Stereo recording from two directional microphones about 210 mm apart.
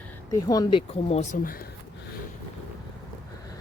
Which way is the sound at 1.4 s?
45° left (ahead or behind).